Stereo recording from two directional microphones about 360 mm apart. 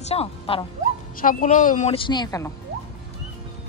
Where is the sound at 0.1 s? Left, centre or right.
Centre.